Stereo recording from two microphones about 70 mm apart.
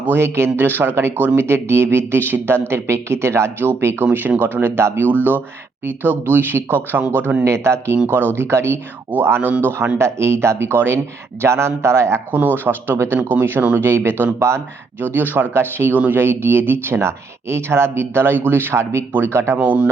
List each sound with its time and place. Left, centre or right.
0.0 s speech: right
7.4 s speech: right
8.0 s speech: right
8.4 s speech: right
12.3 s speech: right
15.0 s speech: right